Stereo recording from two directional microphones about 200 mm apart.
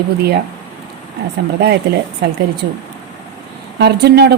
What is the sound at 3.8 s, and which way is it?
Speech, 55° right (ahead or behind).